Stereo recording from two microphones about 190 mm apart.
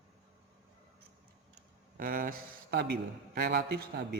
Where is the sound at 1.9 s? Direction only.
45° right (ahead or behind).